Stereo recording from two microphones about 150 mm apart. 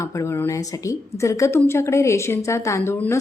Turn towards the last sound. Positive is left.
turn(degrees=15)  # may be behind; listen again after turning